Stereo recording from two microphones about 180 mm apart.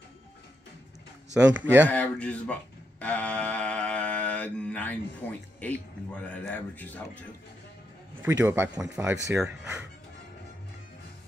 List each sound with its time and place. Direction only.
1.3 s speech: 5° right (ahead or behind)
1.9 s speech: 5° left (ahead or behind)
8.2 s speech: 10° right (ahead or behind)